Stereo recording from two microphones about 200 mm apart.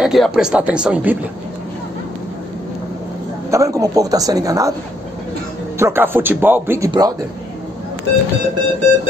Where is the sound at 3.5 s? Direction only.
15° right (ahead or behind).